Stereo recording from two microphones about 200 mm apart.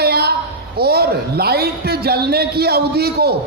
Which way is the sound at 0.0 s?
50° right (ahead or behind).